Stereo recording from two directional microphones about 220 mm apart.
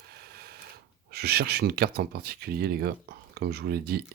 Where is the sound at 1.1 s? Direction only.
45° right (ahead or behind).